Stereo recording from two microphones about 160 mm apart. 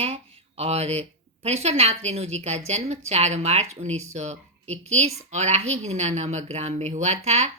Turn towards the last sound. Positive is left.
turn(degrees=-40)  # may be behind; listen again after turning